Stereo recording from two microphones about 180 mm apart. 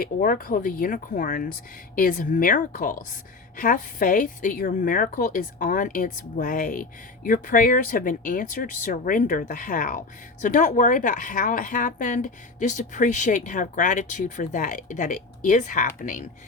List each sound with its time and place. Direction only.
0.0 s a woman's voice: 55° left (ahead or behind)